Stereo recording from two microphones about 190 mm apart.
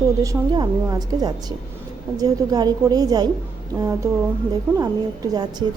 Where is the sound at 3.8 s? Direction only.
15° right (ahead or behind).